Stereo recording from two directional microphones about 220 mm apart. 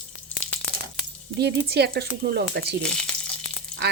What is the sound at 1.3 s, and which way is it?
Speech, 45° right (ahead or behind).